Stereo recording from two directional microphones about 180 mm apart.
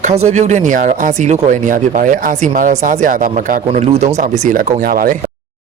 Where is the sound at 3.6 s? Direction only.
35° right (ahead or behind).